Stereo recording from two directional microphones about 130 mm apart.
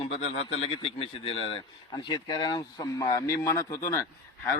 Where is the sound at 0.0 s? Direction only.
55° left (ahead or behind).